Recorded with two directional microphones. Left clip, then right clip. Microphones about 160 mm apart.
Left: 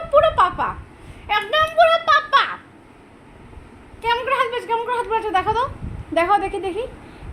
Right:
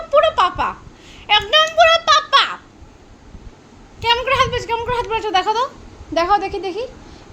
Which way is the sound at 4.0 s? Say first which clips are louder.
Right 4 dB; 20° right (ahead or behind).